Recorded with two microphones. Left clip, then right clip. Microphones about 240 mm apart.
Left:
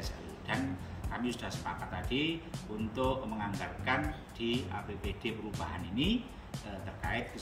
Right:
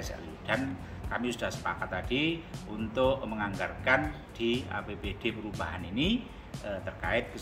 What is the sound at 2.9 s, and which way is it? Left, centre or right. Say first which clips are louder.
Speech: right 6 dB; centre.